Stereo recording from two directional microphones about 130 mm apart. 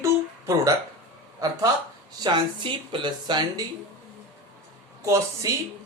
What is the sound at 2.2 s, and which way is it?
Speech, 40° right (ahead or behind).